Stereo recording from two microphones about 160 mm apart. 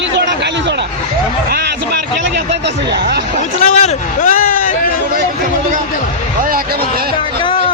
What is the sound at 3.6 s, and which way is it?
A man's voice, 45° left (ahead or behind).